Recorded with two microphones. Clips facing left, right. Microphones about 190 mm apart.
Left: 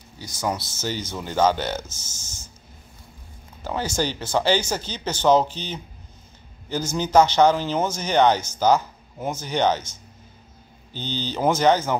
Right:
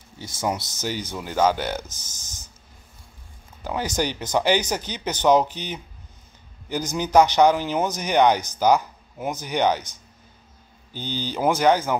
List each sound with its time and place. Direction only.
0.2 s speech: 25° right (ahead or behind)
3.6 s speech: 15° right (ahead or behind)
10.9 s speech: 10° right (ahead or behind)